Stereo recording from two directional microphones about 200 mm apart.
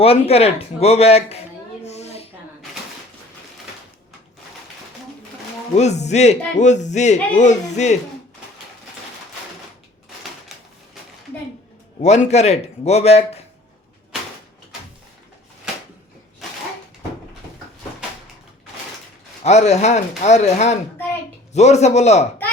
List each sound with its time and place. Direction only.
0.0 s speech: 30° left (ahead or behind)
1.8 s a sound: 35° left (ahead or behind)
5.7 s speech: 35° left (ahead or behind)
11.9 s speech: 35° left (ahead or behind)
19.4 s speech: 35° left (ahead or behind)